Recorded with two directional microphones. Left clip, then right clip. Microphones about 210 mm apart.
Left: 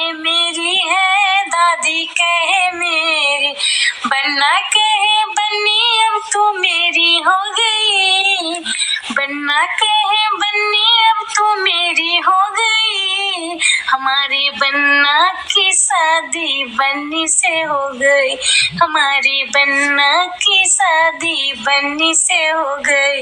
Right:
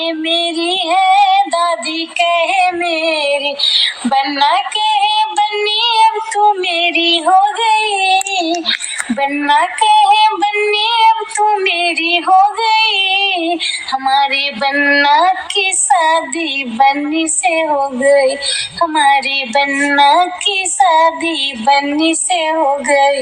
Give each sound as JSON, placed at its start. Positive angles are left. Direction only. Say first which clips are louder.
{"t": 0.3, "sound": "female singing", "louder": "left 1 dB", "side_deg": 0}
{"t": 7.6, "sound": "a sound", "louder": "right 1 dB", "side_deg": 0}
{"t": 9.5, "sound": "child singing", "louder": "right 3 dB", "side_deg": 5}